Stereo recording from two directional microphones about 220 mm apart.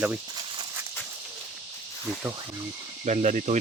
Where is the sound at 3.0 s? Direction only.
30° right (ahead or behind).